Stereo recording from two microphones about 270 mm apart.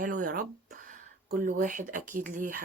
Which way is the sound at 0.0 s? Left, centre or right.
Right.